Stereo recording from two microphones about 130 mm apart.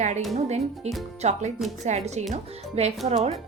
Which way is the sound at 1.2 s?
60° right (ahead or behind).